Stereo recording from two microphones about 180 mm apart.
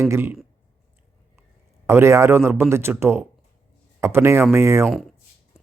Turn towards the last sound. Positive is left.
turn(degrees=-15)  # may be behind; listen again after turning